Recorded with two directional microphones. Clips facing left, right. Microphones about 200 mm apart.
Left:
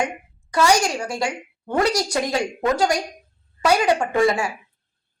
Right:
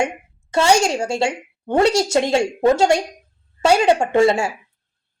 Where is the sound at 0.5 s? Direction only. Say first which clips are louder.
Right 3 dB; 25° right (ahead or behind).